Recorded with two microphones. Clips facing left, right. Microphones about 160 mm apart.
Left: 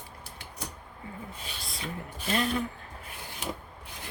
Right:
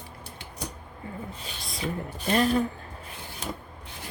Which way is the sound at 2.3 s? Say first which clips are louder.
Right 6 dB; 40° right (ahead or behind).